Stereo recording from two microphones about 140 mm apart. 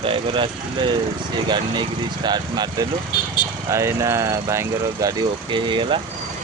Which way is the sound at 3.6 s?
20° right (ahead or behind).